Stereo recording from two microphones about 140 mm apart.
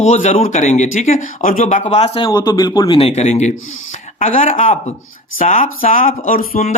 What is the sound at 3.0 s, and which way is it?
Speech, 50° left (ahead or behind).